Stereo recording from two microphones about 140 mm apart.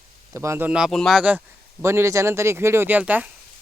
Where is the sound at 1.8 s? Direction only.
20° right (ahead or behind).